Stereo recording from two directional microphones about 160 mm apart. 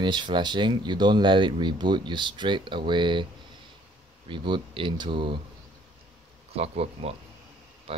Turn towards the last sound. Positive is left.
turn(degrees=-40)  # may be behind; listen again after turning